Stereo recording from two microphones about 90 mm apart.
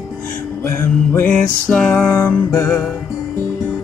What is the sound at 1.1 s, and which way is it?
Music, 20° left (ahead or behind).